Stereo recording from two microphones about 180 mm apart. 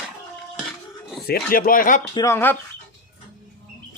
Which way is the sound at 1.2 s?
55° left (ahead or behind).